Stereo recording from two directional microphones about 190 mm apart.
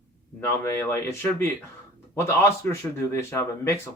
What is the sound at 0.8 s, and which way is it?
Speech, 10° left (ahead or behind).